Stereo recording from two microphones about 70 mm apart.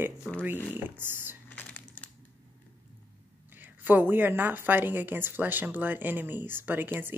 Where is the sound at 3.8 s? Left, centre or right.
Right.